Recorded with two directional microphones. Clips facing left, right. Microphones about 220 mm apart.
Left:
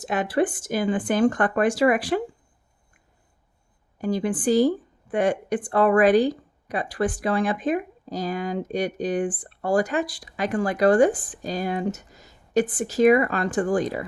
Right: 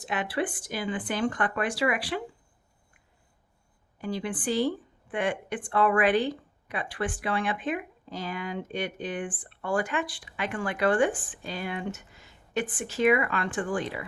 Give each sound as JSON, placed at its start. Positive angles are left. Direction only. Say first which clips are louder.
{"t": 0.0, "sound": "speech", "louder": "left 7 dB", "side_deg": 45}
{"t": 3.9, "sound": "a woman's voice", "louder": "left 7 dB", "side_deg": 45}